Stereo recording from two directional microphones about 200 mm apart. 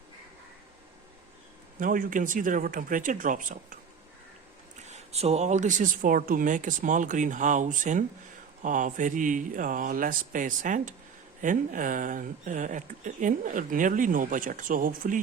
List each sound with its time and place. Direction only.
1.8 s speech: 45° right (ahead or behind)
4.9 s speech: 35° right (ahead or behind)